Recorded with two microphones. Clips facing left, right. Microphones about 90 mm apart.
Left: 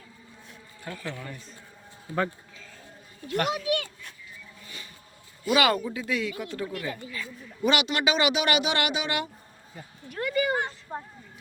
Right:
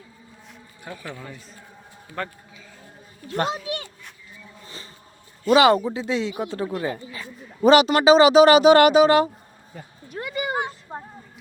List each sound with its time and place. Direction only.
0.9 s a man's voice: 15° right (ahead or behind)
1.3 s a man's voice: centre (ahead or behind)
3.2 s a child's voice: 30° right (ahead or behind)
4.6 s a sound: 30° right (ahead or behind)
5.5 s speech: 30° right (ahead or behind)
10.1 s a sound: 20° right (ahead or behind)